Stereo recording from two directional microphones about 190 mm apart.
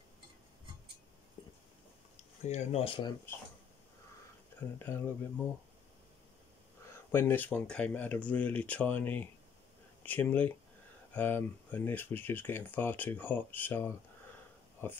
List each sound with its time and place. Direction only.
2.1 s speech: 35° left (ahead or behind)
4.6 s speech: 10° left (ahead or behind)
7.1 s speech: 10° left (ahead or behind)